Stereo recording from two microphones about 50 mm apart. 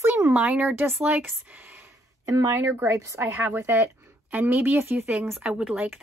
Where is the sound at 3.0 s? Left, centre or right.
Right.